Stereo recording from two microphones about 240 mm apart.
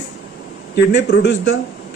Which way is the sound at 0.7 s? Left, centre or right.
Left.